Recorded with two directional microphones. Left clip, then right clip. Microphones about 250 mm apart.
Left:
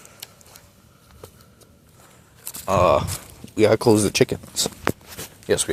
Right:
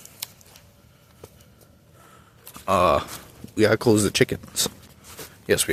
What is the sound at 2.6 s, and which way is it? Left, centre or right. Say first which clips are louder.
Speech: left 2 dB; centre.